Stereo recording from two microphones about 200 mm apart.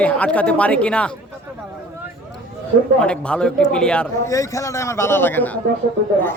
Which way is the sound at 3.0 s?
5° left (ahead or behind).